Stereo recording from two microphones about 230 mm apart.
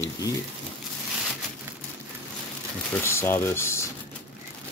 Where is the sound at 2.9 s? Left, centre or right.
Centre.